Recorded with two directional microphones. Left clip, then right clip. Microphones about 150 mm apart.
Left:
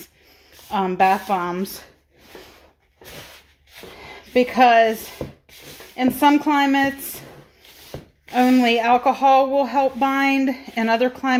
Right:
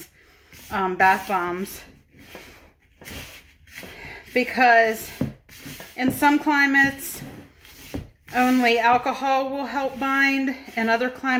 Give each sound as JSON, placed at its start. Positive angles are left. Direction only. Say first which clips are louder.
{"t": 0.7, "sound": "a woman's voice", "louder": "left 1 dB", "side_deg": 35}
{"t": 4.1, "sound": "speech", "louder": "left 5 dB", "side_deg": 45}
{"t": 6.0, "sound": "speech", "louder": "left 3 dB", "side_deg": 45}
{"t": 7.9, "sound": "a sound", "louder": "right 2 dB", "side_deg": 5}
{"t": 8.4, "sound": "speech", "louder": "left 2 dB", "side_deg": 45}